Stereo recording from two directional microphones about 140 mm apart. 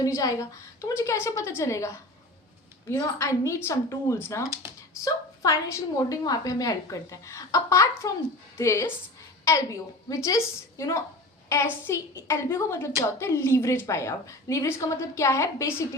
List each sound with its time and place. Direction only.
0.0 s a woman's voice: 25° left (ahead or behind)